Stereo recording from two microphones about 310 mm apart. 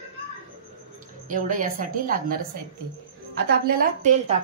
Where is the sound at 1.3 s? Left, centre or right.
Right.